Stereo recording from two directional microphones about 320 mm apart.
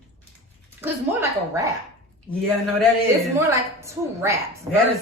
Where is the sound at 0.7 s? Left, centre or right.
Centre.